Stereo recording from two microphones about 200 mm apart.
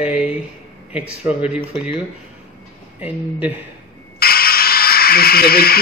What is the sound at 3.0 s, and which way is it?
Speech, 5° right (ahead or behind).